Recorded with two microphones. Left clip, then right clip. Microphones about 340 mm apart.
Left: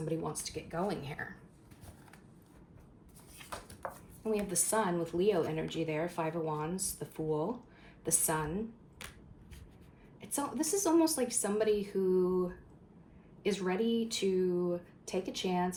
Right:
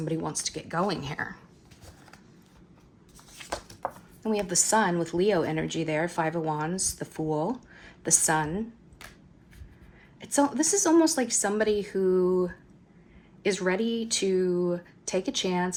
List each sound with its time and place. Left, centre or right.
0.1 s speech: right
4.2 s speech: right
10.2 s speech: right